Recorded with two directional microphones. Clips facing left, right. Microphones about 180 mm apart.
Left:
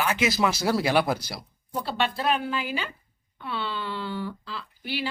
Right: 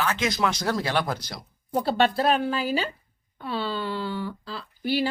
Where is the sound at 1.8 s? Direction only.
40° right (ahead or behind).